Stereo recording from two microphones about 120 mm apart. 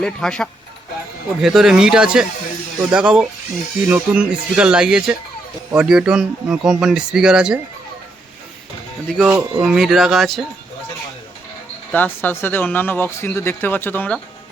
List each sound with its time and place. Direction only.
0.0 s speech: 5° left (ahead or behind)
9.0 s speech: 5° right (ahead or behind)
11.9 s speech: 15° left (ahead or behind)